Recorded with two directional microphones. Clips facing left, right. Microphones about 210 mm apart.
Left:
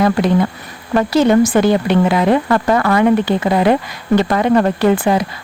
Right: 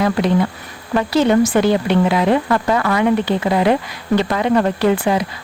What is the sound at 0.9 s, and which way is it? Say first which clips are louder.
Speech: left 2 dB; 45° left (ahead or behind).